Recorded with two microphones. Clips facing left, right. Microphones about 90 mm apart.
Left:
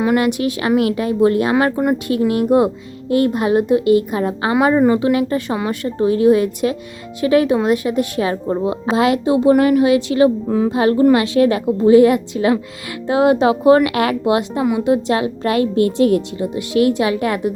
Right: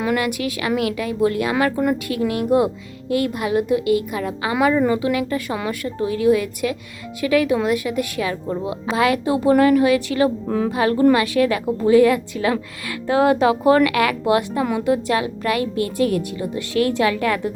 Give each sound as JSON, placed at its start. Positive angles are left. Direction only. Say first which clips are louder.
{"t": 0.0, "sound": "a woman's voice", "louder": "left 5 dB", "side_deg": 25}